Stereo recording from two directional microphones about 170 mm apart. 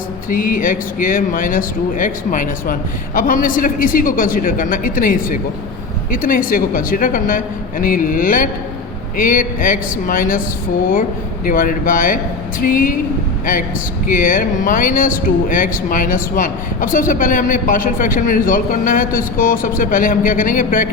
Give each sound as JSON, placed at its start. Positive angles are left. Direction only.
{"t": 0.3, "sound": "a man's voice", "side_deg": 55}
{"t": 11.4, "sound": "a man's voice", "side_deg": 55}